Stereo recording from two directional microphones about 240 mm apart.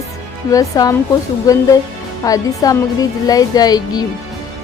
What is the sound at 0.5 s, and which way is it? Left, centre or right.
Speech, centre.